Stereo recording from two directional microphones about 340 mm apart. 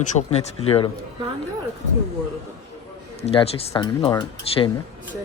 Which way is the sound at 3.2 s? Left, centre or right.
Centre.